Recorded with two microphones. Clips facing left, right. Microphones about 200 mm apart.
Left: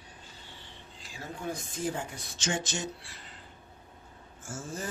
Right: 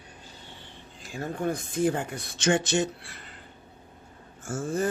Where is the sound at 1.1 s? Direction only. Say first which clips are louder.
Right 8 dB; 55° right (ahead or behind).